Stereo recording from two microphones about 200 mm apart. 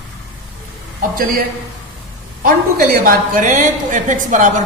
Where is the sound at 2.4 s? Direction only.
45° right (ahead or behind).